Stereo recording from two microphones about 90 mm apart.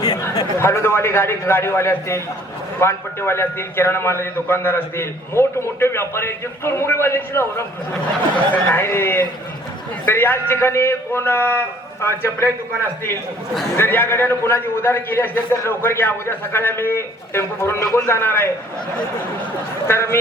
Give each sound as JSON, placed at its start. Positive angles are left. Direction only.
{"t": 0.0, "sound": "a sound", "side_deg": 50}
{"t": 0.6, "sound": "a man's voice", "side_deg": 30}
{"t": 8.6, "sound": "a man's voice", "side_deg": 25}
{"t": 13.7, "sound": "a man's voice", "side_deg": 25}
{"t": 19.9, "sound": "a man's voice", "side_deg": 30}